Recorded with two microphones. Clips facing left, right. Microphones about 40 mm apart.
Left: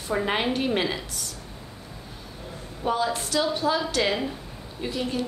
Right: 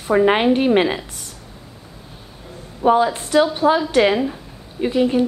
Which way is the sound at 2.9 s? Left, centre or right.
Right.